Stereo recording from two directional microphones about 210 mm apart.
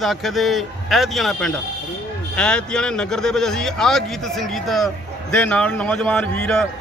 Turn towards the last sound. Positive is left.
turn(degrees=5)  # may be behind; listen again after turning